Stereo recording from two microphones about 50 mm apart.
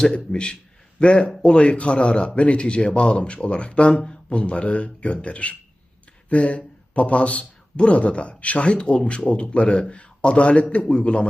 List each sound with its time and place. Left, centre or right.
0.0 s a man's voice: centre